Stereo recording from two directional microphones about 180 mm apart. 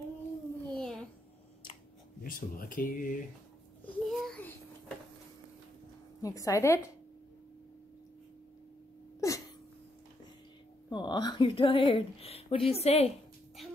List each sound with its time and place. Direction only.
0.7 s a sound: 5° left (ahead or behind)
2.2 s speech: 50° left (ahead or behind)
3.8 s a sound: 5° left (ahead or behind)
6.2 s a woman's voice: 20° left (ahead or behind)
9.2 s sneeze: 20° left (ahead or behind)
10.9 s a woman's voice: 25° left (ahead or behind)